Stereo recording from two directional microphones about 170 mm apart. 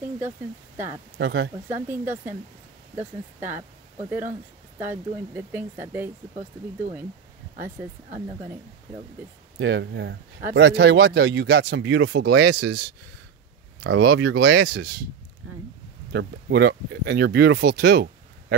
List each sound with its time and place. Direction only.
1.1 s speech: 90° right
1.7 s speech: 10° right (ahead or behind)
4.7 s speech: 10° right (ahead or behind)
7.8 s speech: 10° right (ahead or behind)
9.6 s speech: 90° right; by 12.8 s 70° right (ahead or behind)
13.8 s speech: 90° right
16.1 s speech: 75° right (ahead or behind)